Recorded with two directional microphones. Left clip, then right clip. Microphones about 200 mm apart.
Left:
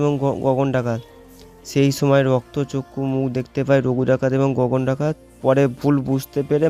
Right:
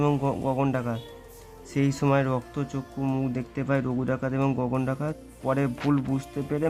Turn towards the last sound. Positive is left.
turn(degrees=40)  # may be behind; listen again after turning